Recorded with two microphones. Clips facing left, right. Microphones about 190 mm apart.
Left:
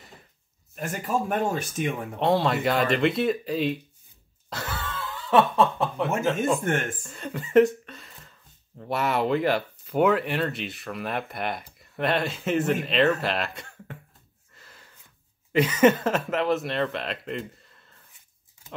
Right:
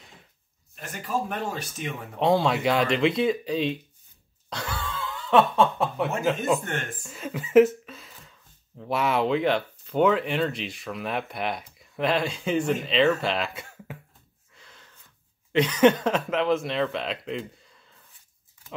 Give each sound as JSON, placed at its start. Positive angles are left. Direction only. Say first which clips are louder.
{"t": 0.7, "sound": "speech", "louder": "left 3 dB", "side_deg": 45}
{"t": 2.1, "sound": "speech", "louder": "right 2 dB", "side_deg": 0}
{"t": 4.5, "sound": "snicker", "louder": "right 1 dB", "side_deg": 5}
{"t": 6.6, "sound": "speech", "louder": "left 6 dB", "side_deg": 45}
{"t": 7.0, "sound": "speech", "louder": "right 1 dB", "side_deg": -5}
{"t": 14.5, "sound": "a sound", "louder": "even", "side_deg": 5}
{"t": 15.5, "sound": "speech", "louder": "even", "side_deg": 5}